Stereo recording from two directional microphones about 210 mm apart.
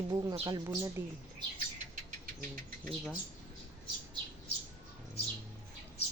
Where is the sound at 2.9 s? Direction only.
Centre (ahead or behind).